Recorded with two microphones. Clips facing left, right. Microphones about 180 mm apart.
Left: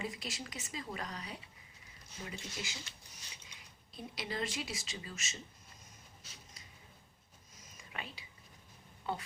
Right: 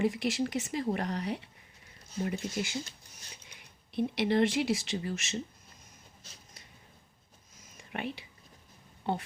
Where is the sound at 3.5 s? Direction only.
65° right (ahead or behind).